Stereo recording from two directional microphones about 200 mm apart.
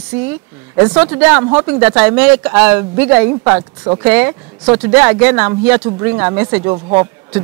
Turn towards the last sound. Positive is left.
turn(degrees=-15)  # may be behind; listen again after turning